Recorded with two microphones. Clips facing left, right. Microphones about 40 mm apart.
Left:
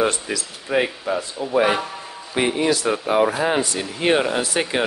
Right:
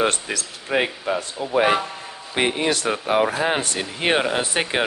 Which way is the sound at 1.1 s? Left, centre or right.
Right.